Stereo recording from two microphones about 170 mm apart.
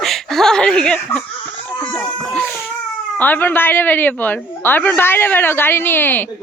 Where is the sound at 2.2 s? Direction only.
5° left (ahead or behind).